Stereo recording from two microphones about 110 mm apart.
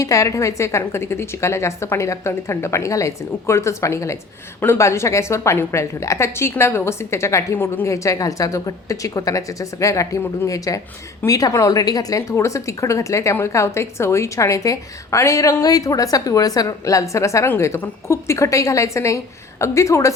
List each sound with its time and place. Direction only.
0.0 s a woman's voice: 30° left (ahead or behind)